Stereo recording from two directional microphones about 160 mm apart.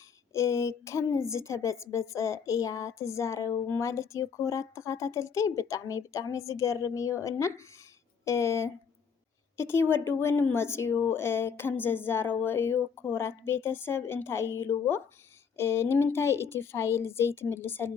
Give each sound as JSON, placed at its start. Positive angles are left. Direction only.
{"t": 0.3, "sound": "a woman's voice", "side_deg": 15}